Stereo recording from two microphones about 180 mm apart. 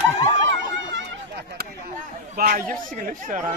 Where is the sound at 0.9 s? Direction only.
70° right (ahead or behind).